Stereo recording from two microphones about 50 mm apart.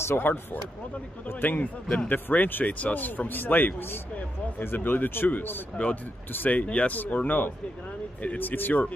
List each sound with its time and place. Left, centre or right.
0.0 s speech: left
6.6 s speech: left